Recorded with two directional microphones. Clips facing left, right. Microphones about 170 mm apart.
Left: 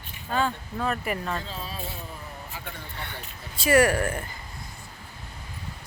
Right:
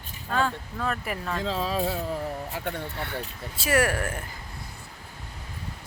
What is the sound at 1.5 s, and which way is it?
Speech, 90° right.